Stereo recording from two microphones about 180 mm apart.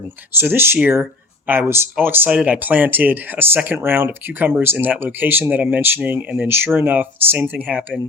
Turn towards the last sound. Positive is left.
turn(degrees=-10)  # may be behind; listen again after turning